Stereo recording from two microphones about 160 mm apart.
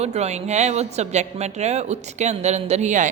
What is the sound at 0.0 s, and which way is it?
Speech, 45° right (ahead or behind).